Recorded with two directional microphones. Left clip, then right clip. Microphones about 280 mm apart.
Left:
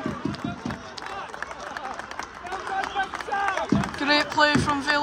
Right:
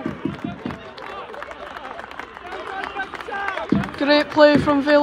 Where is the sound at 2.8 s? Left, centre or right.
Left.